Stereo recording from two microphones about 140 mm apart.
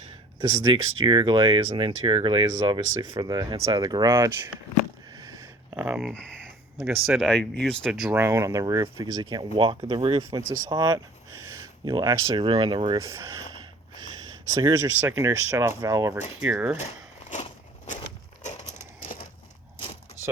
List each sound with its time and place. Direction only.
0.7 s speech: 35° right (ahead or behind); by 4.4 s 20° right (ahead or behind)
5.1 s a sound: 25° right (ahead or behind)
5.7 s speech: 5° right (ahead or behind)
8.1 s speech: 20° right (ahead or behind); by 10.2 s 40° right (ahead or behind)
10.7 s speech: 25° right (ahead or behind)
12.3 s speech: 40° right (ahead or behind); by 16.1 s 20° right (ahead or behind)
16.4 s speech: 10° right (ahead or behind)